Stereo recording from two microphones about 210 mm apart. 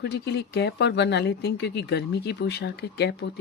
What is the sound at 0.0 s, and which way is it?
Speech, 55° left (ahead or behind).